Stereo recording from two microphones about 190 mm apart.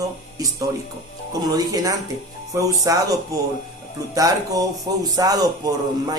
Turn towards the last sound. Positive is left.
turn(degrees=-20)  # may be behind; listen again after turning